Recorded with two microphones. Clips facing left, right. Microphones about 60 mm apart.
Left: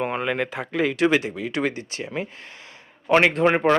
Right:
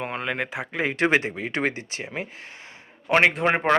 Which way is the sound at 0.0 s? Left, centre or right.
Centre.